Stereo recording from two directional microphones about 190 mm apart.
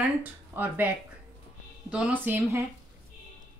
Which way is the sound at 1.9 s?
5° right (ahead or behind).